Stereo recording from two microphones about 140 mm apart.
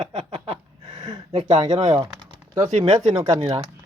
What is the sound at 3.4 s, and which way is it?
Speech, 40° right (ahead or behind).